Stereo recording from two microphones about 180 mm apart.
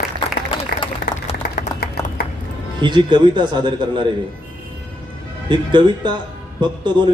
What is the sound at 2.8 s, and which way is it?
A man's voice, 25° right (ahead or behind).